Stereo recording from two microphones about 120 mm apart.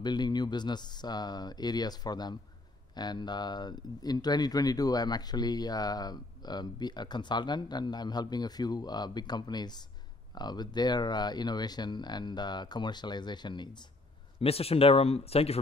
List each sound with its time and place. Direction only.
0.0 s speech: 35° left (ahead or behind)
14.4 s speech: 55° left (ahead or behind)